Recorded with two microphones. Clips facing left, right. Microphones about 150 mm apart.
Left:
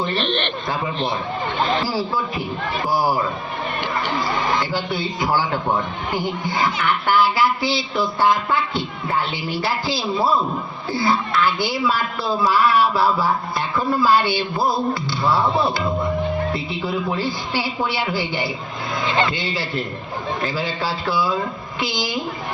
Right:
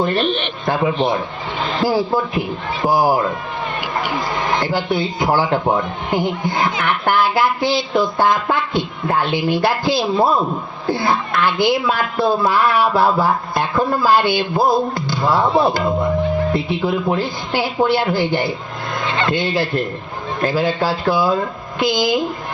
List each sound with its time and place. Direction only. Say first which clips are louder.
0.2 s speech: right 4 dB; 5° right (ahead or behind)
0.7 s a man's voice: right 8 dB; 60° right (ahead or behind)
4.2 s speech: right 1 dB; 50° right (ahead or behind)